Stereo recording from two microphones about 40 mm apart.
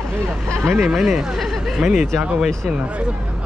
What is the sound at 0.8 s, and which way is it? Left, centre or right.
Speech, centre.